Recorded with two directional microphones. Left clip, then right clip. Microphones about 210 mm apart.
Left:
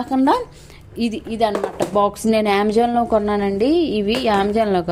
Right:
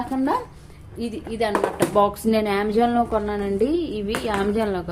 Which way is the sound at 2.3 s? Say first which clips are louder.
Left 5 dB; 30° left (ahead or behind).